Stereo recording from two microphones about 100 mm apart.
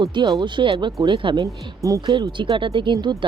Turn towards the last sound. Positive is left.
turn(degrees=-50)  # may be behind; listen again after turning